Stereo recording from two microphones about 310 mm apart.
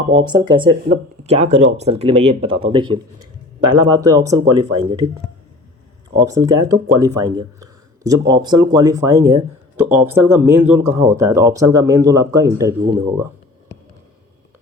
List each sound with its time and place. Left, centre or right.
0.1 s speech: centre
6.1 s speech: centre